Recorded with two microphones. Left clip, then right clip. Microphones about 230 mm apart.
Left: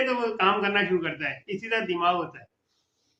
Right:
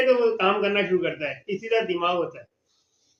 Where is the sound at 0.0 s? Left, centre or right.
Centre.